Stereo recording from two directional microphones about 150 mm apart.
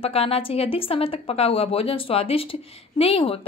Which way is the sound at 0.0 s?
40° left (ahead or behind).